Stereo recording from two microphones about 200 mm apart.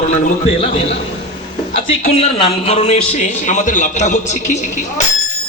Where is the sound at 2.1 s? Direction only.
30° left (ahead or behind).